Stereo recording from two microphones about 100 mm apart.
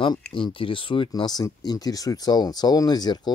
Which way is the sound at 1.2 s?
45° left (ahead or behind).